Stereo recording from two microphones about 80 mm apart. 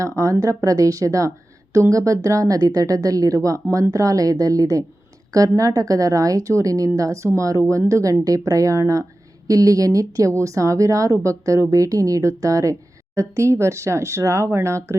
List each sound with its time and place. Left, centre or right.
0.0 s a woman's voice: right